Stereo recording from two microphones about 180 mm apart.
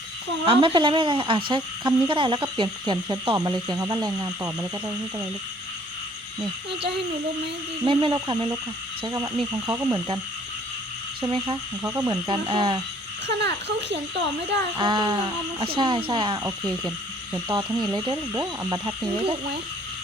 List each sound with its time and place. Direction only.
0.4 s speech: 30° right (ahead or behind)
7.9 s speech: 25° right (ahead or behind)
11.3 s speech: 30° right (ahead or behind)
11.8 s speech: 15° right (ahead or behind)
12.3 s speech: 25° right (ahead or behind)
13.2 s speech: 70° right (ahead or behind)
14.8 s speech: 25° right (ahead or behind)